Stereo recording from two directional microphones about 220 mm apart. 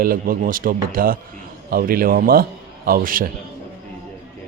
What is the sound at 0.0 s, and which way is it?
A man's voice, 40° right (ahead or behind).